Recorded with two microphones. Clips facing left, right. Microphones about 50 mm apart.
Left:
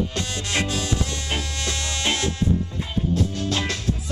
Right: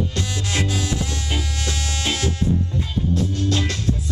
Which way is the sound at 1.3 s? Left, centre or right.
Centre.